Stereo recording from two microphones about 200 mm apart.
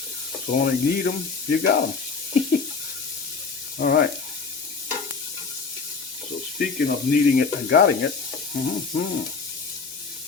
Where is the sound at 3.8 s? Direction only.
50° left (ahead or behind).